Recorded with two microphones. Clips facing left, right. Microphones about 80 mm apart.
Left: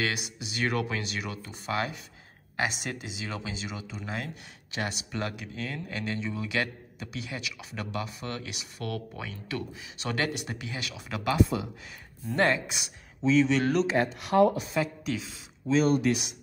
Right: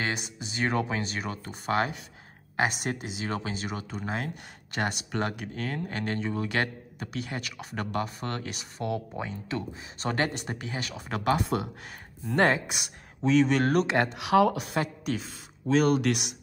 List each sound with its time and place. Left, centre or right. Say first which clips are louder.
0.0 s speech: even; right
1.5 s speech: right 4 dB; right
8.7 s speech: right 4 dB; right
11.4 s speech: right 2 dB; right
13.8 s speech: right 1 dB; right